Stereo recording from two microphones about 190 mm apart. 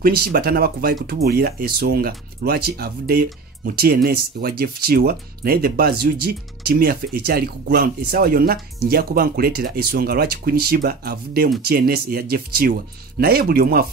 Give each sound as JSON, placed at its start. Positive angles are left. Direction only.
{"t": 0.0, "sound": "speech", "side_deg": -55}